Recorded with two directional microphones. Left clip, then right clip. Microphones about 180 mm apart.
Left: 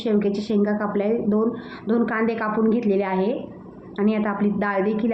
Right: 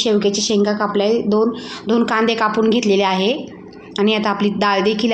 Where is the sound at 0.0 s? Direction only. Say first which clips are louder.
Right 7 dB; 20° right (ahead or behind).